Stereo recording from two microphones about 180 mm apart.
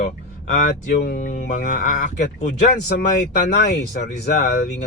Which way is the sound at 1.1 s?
45° left (ahead or behind).